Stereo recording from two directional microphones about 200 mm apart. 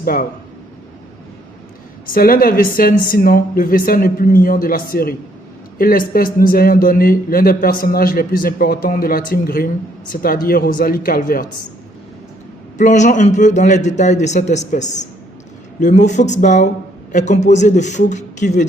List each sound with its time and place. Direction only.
0.0 s speech: 45° left (ahead or behind)
2.0 s a man's voice: 45° left (ahead or behind)
12.7 s speech: 35° left (ahead or behind)